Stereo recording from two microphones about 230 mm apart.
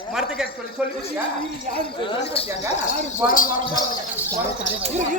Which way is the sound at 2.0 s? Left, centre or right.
Left.